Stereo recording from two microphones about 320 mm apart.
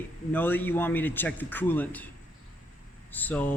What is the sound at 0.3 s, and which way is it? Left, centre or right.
Speech, centre.